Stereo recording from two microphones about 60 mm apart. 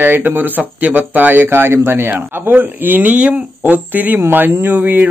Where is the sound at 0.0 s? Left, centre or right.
Right.